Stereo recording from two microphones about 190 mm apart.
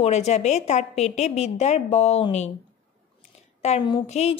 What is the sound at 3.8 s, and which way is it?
Speech, 25° left (ahead or behind).